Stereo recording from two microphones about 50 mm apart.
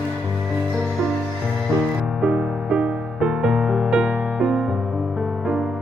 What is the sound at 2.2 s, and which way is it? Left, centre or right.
Music, centre.